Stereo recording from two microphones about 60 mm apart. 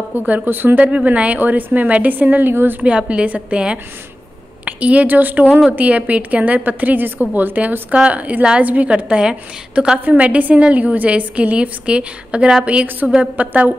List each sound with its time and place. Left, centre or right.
0.1 s speech: right
0.7 s a woman's voice: right
3.1 s a woman's voice: right
13.0 s a woman's voice: centre
13.4 s a woman's voice: right